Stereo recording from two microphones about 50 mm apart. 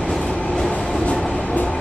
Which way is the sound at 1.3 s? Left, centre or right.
Left.